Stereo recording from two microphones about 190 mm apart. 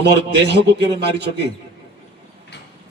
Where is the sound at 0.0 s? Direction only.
65° right (ahead or behind).